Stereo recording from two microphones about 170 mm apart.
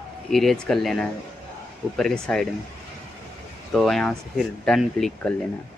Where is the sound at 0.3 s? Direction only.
Centre (ahead or behind).